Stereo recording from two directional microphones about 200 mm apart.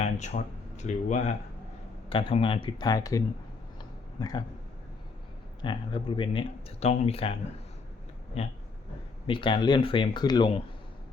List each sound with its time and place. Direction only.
0.0 s speech: 35° left (ahead or behind); by 3.2 s 15° left (ahead or behind)
3.8 s a sound: 20° left (ahead or behind)
5.6 s speech: 25° left (ahead or behind)
9.2 s speech: 25° left (ahead or behind)